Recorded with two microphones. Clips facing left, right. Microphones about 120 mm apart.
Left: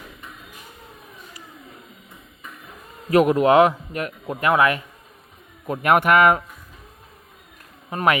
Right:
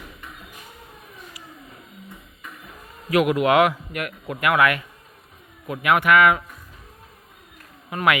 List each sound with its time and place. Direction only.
3.1 s a man's voice: 35° left (ahead or behind)
7.9 s a man's voice: 35° left (ahead or behind)